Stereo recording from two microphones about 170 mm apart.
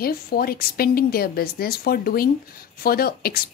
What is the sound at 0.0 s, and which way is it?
A woman's voice, 65° left (ahead or behind).